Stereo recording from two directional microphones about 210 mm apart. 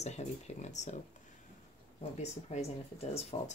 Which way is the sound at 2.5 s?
30° left (ahead or behind).